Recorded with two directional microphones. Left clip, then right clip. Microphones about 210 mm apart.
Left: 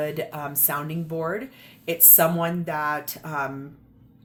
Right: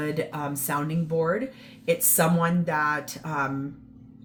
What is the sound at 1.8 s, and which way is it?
Speech, 45° left (ahead or behind).